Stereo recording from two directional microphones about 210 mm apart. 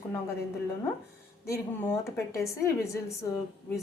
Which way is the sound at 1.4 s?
15° left (ahead or behind).